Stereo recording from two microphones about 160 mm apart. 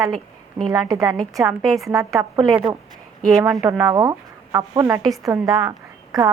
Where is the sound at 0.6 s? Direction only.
Centre (ahead or behind).